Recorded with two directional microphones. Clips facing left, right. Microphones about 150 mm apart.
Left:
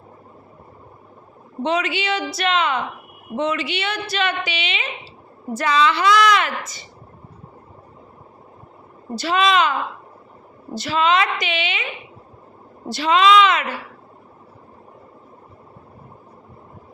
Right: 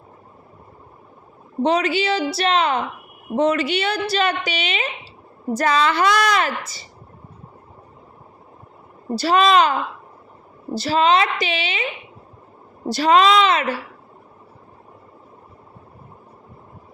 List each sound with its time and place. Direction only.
1.6 s a woman's voice: 35° right (ahead or behind)
9.1 s a woman's voice: 40° right (ahead or behind)
10.8 s a woman's voice: 35° right (ahead or behind)
12.9 s a woman's voice: 40° right (ahead or behind)